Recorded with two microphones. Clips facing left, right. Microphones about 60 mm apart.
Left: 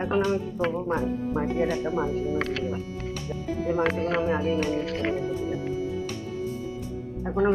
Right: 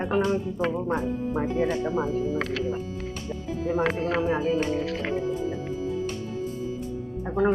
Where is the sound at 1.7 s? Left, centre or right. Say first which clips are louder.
Even; right.